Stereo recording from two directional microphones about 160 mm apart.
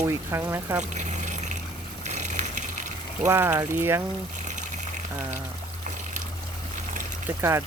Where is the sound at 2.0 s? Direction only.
50° right (ahead or behind).